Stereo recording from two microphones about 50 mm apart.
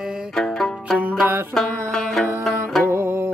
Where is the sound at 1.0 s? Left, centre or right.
Right.